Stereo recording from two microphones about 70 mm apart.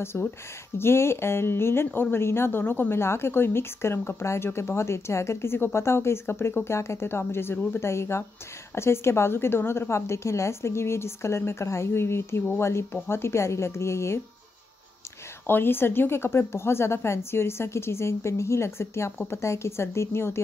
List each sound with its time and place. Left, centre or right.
0.1 s a woman's voice: left
15.4 s a woman's voice: left